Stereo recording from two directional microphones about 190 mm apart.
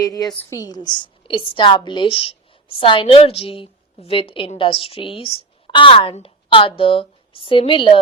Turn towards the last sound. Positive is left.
turn(degrees=25)  # may be behind; listen again after turning